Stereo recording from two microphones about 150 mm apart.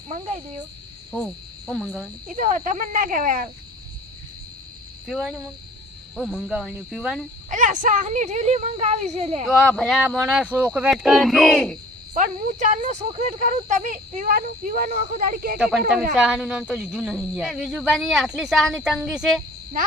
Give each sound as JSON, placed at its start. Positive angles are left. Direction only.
{"t": 1.1, "sound": "cricket", "side_deg": -5}
{"t": 2.2, "sound": "speech", "side_deg": -55}
{"t": 5.0, "sound": "speech", "side_deg": 0}
{"t": 7.5, "sound": "speech", "side_deg": -55}
{"t": 9.5, "sound": "speech", "side_deg": 0}
{"t": 12.1, "sound": "speech", "side_deg": -55}
{"t": 14.8, "sound": "speech", "side_deg": -45}
{"t": 15.2, "sound": "speech", "side_deg": -65}
{"t": 15.5, "sound": "speech", "side_deg": -5}